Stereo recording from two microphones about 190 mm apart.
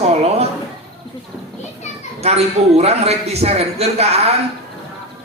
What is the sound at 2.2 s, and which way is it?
Speech, 35° right (ahead or behind).